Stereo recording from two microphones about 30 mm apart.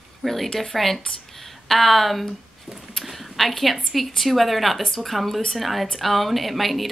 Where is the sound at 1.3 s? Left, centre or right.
Centre.